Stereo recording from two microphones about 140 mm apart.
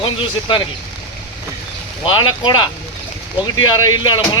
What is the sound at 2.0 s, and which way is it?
Speech, 35° left (ahead or behind).